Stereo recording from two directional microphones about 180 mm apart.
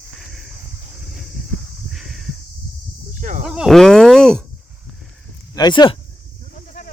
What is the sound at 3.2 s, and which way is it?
Cricket, 45° right (ahead or behind).